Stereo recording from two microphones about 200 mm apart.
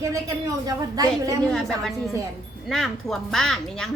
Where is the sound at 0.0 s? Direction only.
15° right (ahead or behind).